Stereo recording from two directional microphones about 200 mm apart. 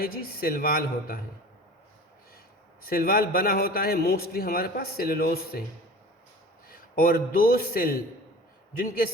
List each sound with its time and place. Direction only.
0.0 s a man's voice: 50° left (ahead or behind)
2.8 s a man's voice: 45° left (ahead or behind)
6.7 s a man's voice: 45° left (ahead or behind)